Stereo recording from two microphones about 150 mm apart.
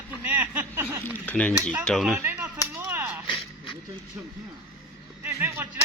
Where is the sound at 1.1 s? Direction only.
10° left (ahead or behind).